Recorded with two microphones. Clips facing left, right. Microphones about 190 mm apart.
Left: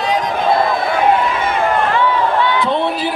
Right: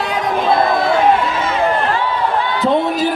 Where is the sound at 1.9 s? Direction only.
40° right (ahead or behind).